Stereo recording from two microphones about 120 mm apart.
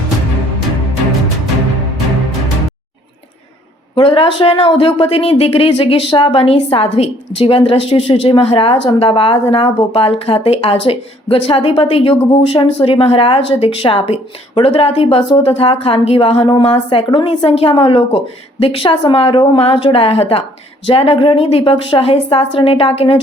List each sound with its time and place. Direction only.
3.9 s a woman's voice: 50° left (ahead or behind)